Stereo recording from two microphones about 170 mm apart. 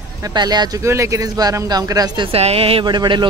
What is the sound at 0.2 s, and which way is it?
Speech, 25° right (ahead or behind).